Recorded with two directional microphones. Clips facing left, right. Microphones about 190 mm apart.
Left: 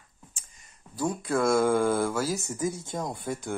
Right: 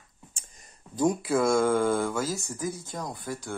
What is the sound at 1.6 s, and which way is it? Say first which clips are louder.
Mantra: even; 10° left (ahead or behind).